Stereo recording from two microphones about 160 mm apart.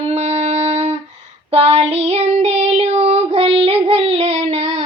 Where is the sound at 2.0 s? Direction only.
35° right (ahead or behind).